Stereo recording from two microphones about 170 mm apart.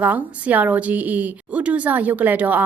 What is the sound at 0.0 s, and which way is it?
A woman's voice, 10° right (ahead or behind).